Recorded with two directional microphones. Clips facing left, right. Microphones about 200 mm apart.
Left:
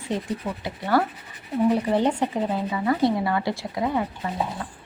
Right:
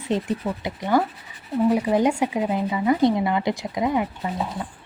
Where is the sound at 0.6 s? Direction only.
15° right (ahead or behind).